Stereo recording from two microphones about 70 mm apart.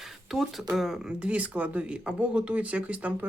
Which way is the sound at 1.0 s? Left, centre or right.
Centre.